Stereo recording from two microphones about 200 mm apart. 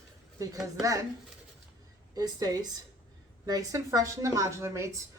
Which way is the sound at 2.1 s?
20° right (ahead or behind).